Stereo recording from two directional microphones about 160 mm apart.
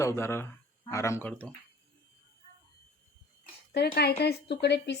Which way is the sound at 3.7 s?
90° left.